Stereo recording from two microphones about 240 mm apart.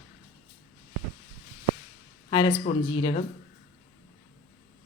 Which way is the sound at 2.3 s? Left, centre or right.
Centre.